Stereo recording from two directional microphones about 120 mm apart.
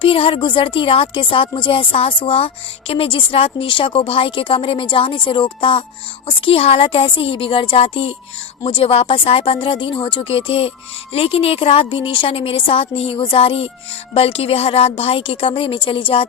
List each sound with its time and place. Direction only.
0.0 s a woman's voice: 50° left (ahead or behind)